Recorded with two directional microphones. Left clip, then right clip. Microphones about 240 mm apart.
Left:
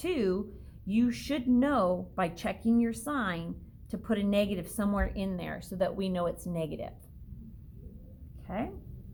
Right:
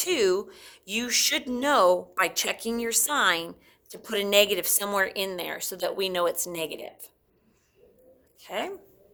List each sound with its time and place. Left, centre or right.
0.0 s speech: right
8.4 s speech: right